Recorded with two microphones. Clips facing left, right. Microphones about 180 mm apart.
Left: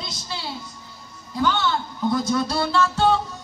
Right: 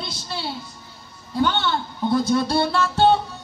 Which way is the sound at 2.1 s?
30° right (ahead or behind).